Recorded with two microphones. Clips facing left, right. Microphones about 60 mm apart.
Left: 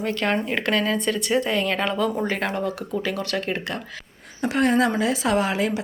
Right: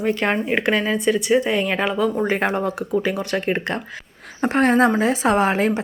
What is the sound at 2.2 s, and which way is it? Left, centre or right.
Speech, right.